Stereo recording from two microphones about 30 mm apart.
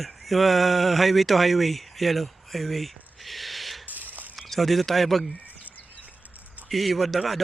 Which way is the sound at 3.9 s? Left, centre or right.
Right.